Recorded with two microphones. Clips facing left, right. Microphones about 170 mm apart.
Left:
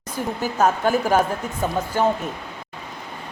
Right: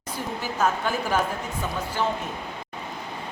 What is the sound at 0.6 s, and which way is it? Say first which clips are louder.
A woman's voice: left 6 dB; 45° left (ahead or behind).